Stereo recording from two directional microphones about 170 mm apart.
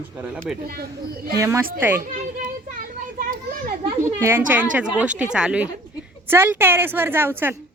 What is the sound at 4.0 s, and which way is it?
A woman's voice, 15° right (ahead or behind).